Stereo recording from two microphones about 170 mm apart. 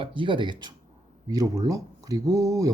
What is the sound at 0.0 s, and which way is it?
Speech, 30° right (ahead or behind).